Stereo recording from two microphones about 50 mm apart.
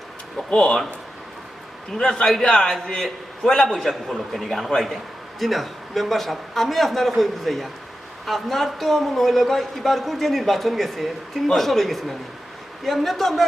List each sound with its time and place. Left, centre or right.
0.3 s speech: centre
2.0 s a man's voice: centre